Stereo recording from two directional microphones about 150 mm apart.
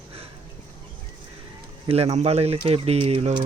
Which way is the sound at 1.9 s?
45° right (ahead or behind).